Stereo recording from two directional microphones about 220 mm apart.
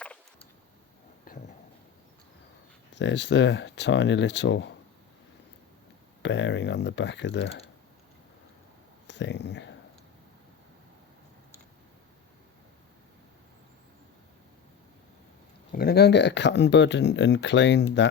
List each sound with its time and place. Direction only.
2.9 s speech: 55° left (ahead or behind)
6.2 s speech: 55° left (ahead or behind)
9.0 s a sound: 55° left (ahead or behind)
15.7 s speech: 45° left (ahead or behind)